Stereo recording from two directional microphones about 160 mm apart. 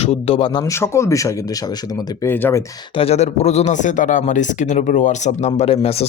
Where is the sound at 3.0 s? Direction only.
40° left (ahead or behind).